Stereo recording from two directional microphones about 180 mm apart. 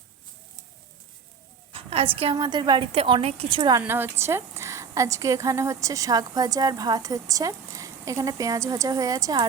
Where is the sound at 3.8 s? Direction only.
10° right (ahead or behind).